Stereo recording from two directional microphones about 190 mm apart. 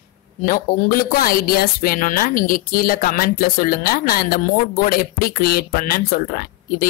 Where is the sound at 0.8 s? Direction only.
50° left (ahead or behind).